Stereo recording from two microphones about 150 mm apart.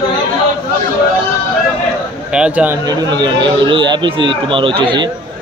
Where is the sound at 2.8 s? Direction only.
30° right (ahead or behind).